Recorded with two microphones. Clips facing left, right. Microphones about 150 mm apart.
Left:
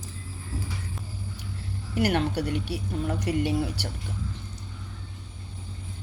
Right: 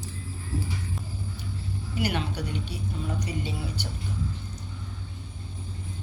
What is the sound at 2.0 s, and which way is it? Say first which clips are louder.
Speech: left 5 dB; 65° left (ahead or behind).